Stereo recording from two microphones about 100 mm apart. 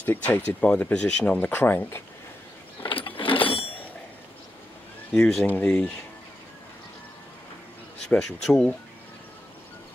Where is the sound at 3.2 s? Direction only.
60° left (ahead or behind).